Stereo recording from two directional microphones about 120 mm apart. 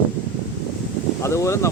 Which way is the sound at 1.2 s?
25° left (ahead or behind).